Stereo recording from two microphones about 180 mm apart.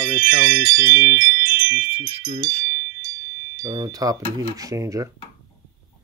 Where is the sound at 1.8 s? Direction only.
30° right (ahead or behind).